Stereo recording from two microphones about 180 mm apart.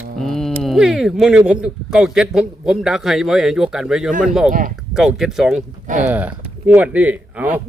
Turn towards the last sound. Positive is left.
turn(degrees=-10)  # may be behind; listen again after turning